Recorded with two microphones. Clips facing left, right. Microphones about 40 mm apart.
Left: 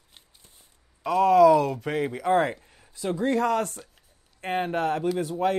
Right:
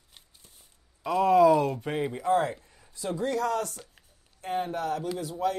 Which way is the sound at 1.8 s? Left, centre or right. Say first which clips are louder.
Left 2 dB; left.